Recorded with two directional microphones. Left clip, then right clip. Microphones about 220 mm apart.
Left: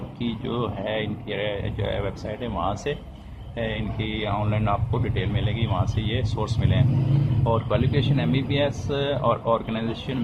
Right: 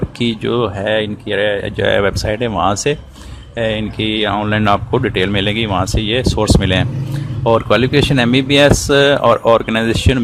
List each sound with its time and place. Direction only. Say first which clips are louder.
0.2 s speech: right 12 dB; 45° right (ahead or behind)